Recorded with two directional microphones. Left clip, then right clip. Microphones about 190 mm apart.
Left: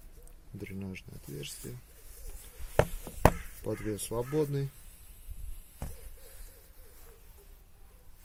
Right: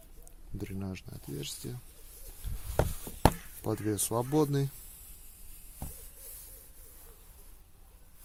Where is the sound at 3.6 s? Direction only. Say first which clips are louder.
Right 3 dB; 40° right (ahead or behind).